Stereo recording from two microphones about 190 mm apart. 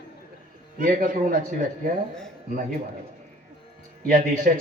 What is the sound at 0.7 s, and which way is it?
Speech, 45° right (ahead or behind).